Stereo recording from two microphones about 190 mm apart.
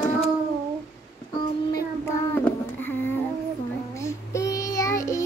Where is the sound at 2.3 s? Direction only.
10° left (ahead or behind).